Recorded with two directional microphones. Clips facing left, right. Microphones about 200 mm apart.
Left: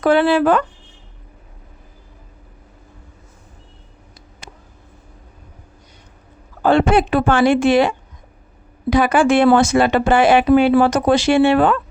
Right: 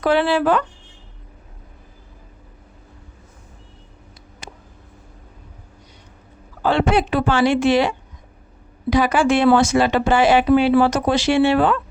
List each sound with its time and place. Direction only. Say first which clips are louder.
0.0 s speech: left 3 dB; 50° left (ahead or behind)
6.6 s speech: left 4 dB; 50° left (ahead or behind)